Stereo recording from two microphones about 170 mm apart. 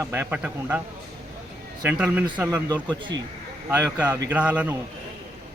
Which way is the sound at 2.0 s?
10° right (ahead or behind).